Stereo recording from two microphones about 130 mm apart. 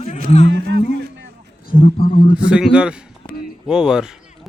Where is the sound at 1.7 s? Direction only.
85° left.